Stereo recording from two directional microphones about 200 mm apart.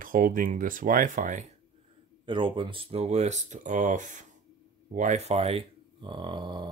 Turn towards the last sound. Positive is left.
turn(degrees=-20)  # may be behind; listen again after turning